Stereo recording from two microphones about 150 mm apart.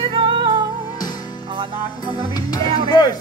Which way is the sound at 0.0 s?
35° right (ahead or behind).